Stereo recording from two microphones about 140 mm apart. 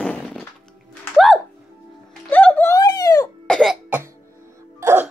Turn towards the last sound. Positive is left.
turn(degrees=-20)  # may be behind; listen again after turning